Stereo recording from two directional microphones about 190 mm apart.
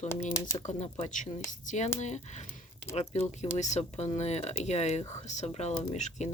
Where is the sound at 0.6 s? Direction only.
35° left (ahead or behind).